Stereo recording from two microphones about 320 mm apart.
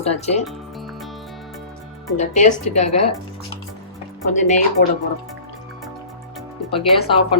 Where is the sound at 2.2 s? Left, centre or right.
Left.